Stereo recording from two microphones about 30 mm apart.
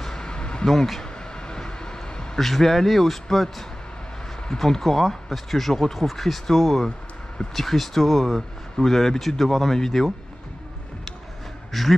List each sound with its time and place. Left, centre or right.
0.2 s a sound: left
0.7 s speech: centre
1.3 s vehicle: left
2.3 s speech: centre
11.7 s speech: centre